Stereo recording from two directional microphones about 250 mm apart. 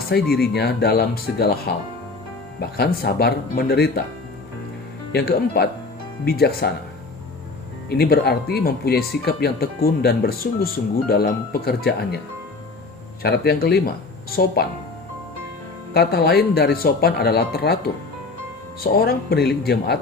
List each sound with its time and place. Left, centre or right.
0.4 s speech: left
5.1 s speech: left
7.9 s speech: left
13.2 s speech: left
15.9 s speech: left
18.8 s speech: left